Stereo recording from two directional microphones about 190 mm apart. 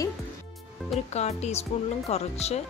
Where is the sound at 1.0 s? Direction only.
35° left (ahead or behind).